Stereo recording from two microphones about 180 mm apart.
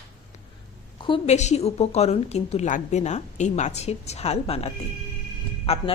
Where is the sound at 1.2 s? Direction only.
40° left (ahead or behind).